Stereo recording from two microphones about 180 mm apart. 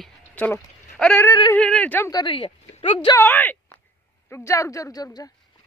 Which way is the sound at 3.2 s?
10° left (ahead or behind).